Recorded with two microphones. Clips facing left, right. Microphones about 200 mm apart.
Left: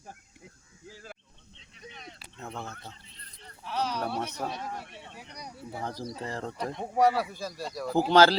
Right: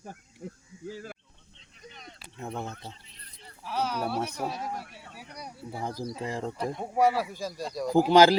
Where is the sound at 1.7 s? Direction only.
Centre (ahead or behind).